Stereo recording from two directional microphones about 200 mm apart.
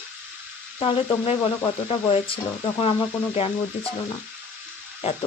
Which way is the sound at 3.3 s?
30° left (ahead or behind).